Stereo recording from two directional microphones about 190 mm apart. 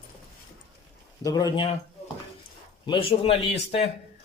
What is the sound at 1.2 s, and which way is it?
Speech, 20° left (ahead or behind).